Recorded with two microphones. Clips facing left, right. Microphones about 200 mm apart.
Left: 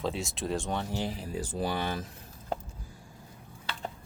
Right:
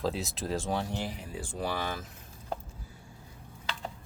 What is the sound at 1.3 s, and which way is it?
Speech, 40° left (ahead or behind).